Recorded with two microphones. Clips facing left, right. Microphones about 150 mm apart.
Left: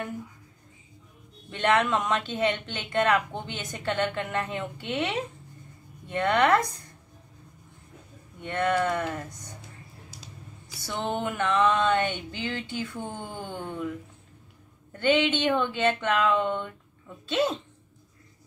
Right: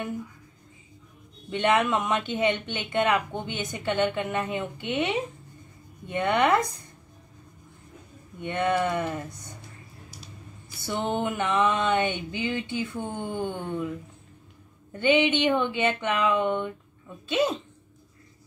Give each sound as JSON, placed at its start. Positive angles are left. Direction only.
{"t": 1.5, "sound": "speech", "side_deg": -15}
{"t": 8.4, "sound": "speech", "side_deg": -15}
{"t": 10.9, "sound": "speech", "side_deg": -15}
{"t": 14.9, "sound": "speech", "side_deg": -15}